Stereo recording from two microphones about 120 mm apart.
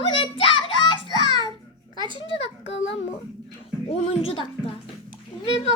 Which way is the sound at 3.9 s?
55° left (ahead or behind).